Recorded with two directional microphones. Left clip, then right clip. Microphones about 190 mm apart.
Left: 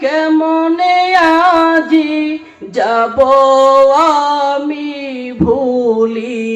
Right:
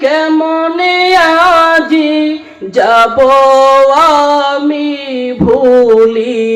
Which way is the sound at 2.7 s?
40° right (ahead or behind).